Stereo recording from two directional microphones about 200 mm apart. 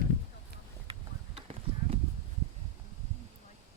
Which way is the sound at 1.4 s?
25° right (ahead or behind).